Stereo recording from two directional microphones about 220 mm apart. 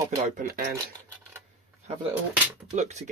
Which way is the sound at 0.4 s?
40° right (ahead or behind).